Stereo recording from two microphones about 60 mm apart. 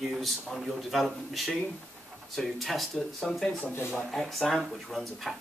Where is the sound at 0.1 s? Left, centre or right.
Centre.